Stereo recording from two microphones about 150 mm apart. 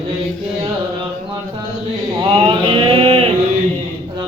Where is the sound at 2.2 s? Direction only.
35° right (ahead or behind).